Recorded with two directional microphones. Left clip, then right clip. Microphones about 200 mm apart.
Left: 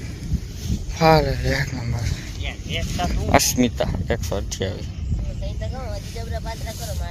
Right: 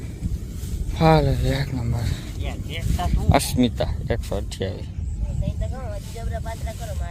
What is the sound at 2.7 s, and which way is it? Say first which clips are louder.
Speech: left 4 dB; 65° right (ahead or behind).